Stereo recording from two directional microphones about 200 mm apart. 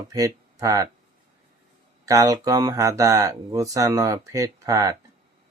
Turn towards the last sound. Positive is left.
turn(degrees=-15)  # may be behind; listen again after turning